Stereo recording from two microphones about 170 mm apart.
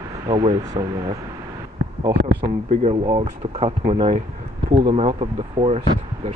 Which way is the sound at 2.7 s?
45° right (ahead or behind).